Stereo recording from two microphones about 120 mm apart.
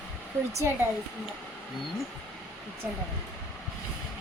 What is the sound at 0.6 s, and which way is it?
Speech, 20° right (ahead or behind).